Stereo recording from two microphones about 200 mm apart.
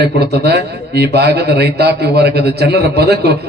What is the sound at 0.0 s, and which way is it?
A man's voice, 55° right (ahead or behind).